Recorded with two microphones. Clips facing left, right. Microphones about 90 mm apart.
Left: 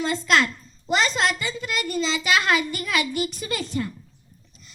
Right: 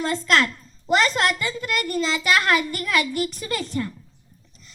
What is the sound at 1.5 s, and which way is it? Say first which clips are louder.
A child's voice: right 2 dB; 50° right (ahead or behind).